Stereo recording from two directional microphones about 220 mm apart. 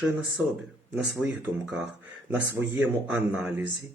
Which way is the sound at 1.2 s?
5° right (ahead or behind).